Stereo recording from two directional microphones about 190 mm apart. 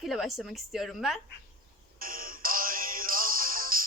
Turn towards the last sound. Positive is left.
turn(degrees=-45)  # may be behind; listen again after turning